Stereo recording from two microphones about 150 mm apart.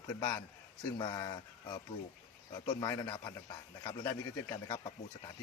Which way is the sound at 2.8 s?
30° left (ahead or behind).